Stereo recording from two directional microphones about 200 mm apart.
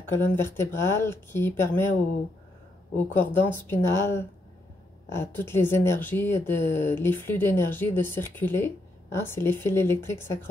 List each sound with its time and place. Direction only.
0.1 s speech: 10° left (ahead or behind)
3.2 s speech: 10° left (ahead or behind)